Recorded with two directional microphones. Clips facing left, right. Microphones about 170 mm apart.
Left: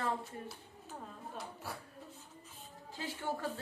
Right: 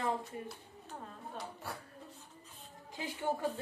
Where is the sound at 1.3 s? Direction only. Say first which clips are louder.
Right 1 dB; centre (ahead or behind).